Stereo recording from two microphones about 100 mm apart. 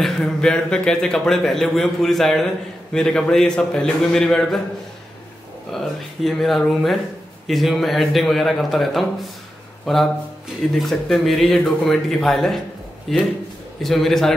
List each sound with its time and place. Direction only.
0.0 s a man's voice: 5° left (ahead or behind)
5.7 s a man's voice: centre (ahead or behind)